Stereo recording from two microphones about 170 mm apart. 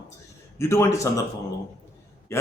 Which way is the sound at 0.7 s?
15° left (ahead or behind).